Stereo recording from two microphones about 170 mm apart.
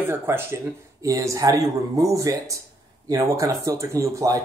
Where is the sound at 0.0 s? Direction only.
15° right (ahead or behind).